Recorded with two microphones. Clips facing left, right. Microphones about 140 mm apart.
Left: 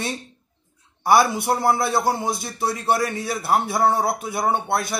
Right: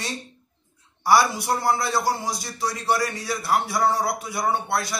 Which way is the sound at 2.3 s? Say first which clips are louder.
Left 3 dB; 55° left (ahead or behind).